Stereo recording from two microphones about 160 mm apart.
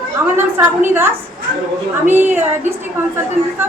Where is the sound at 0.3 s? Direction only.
15° right (ahead or behind).